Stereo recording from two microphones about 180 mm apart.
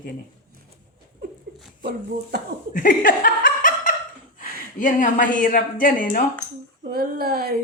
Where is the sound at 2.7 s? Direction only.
50° left (ahead or behind).